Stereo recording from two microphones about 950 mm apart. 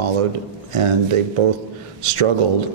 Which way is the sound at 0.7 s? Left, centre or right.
Right.